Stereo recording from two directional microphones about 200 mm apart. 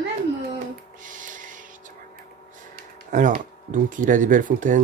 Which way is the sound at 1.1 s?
40° right (ahead or behind).